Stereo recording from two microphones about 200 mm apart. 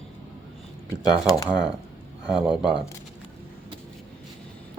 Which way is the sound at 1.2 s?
15° left (ahead or behind).